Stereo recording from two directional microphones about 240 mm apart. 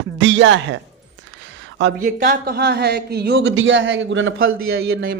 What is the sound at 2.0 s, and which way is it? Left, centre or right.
Speech, right.